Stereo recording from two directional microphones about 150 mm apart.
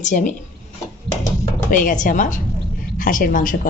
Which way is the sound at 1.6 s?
60° left (ahead or behind).